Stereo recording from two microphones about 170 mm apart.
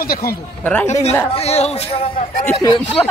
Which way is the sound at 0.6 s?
10° left (ahead or behind).